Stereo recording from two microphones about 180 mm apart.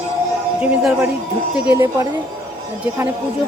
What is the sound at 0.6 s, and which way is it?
Speech, 5° right (ahead or behind).